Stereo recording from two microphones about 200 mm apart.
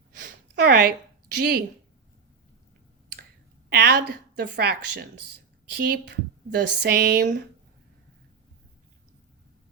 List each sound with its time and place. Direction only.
0.2 s a sound: 50° right (ahead or behind)
1.4 s speech: 50° right (ahead or behind)
3.7 s speech: 50° right (ahead or behind)